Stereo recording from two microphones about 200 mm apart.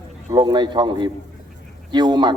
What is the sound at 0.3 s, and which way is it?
Speech, 20° right (ahead or behind).